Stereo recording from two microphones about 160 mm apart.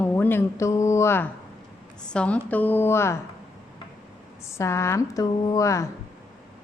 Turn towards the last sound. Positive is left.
turn(degrees=20)  # may be behind; listen again after turning